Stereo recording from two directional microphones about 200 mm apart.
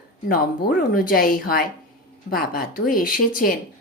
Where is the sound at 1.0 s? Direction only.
45° left (ahead or behind).